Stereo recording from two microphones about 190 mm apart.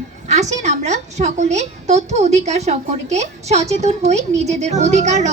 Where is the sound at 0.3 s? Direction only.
35° right (ahead or behind).